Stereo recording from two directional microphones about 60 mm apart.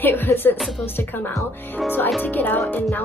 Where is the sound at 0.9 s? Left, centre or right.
Left.